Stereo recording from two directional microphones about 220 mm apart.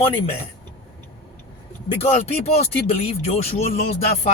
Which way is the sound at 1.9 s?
25° left (ahead or behind).